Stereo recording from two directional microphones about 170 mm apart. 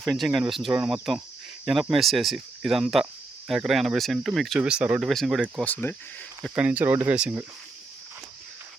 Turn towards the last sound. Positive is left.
turn(degrees=-5)  # may be behind; listen again after turning